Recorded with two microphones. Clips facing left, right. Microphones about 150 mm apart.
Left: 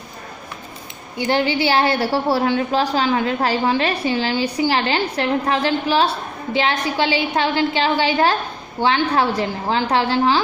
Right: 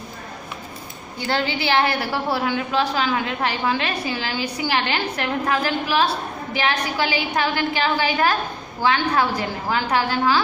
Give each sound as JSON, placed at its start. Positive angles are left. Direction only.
{"t": 1.1, "sound": "a woman's voice", "side_deg": 20}